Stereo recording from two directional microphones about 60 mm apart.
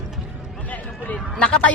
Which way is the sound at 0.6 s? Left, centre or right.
Left.